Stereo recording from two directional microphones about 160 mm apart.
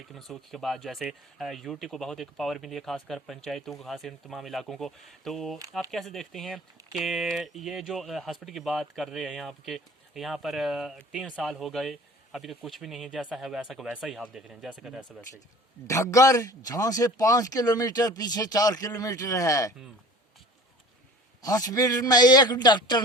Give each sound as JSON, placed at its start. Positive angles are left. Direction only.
{"t": 0.1, "sound": "speech", "side_deg": 0}
{"t": 15.9, "sound": "speech", "side_deg": 20}
{"t": 21.4, "sound": "speech", "side_deg": 20}